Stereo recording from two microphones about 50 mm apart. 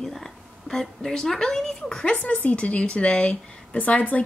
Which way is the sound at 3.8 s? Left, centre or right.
Left.